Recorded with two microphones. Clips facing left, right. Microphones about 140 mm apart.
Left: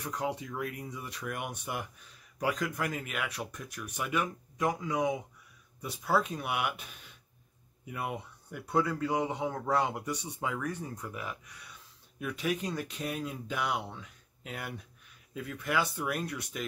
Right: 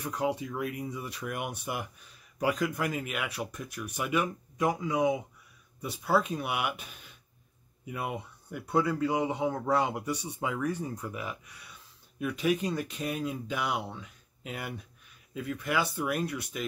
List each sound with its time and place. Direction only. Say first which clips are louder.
0.0 s speech: right 4 dB; 5° right (ahead or behind)